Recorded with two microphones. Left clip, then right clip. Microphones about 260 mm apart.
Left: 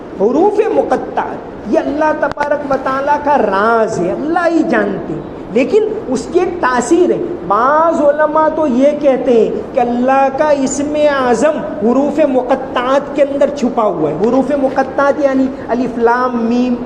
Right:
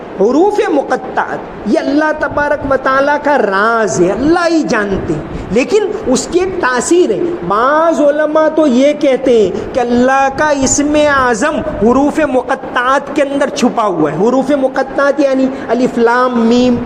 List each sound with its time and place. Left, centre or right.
0.2 s a man's voice: right